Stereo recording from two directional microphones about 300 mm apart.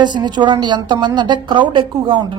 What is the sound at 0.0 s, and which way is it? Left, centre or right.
A woman's voice, centre.